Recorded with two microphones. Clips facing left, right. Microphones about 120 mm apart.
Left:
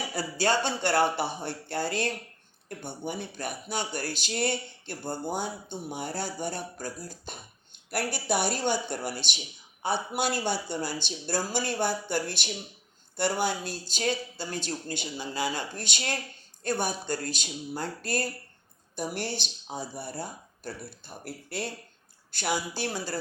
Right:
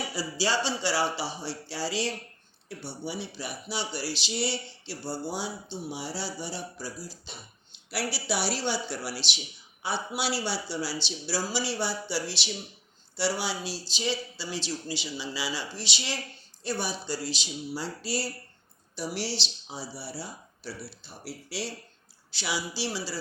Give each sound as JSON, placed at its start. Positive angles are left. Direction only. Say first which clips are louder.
{"t": 0.1, "sound": "speech", "louder": "left 4 dB", "side_deg": 55}